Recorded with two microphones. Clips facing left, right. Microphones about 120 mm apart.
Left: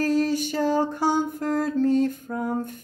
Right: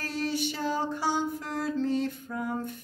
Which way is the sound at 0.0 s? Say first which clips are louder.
Left 9 dB; 45° left (ahead or behind).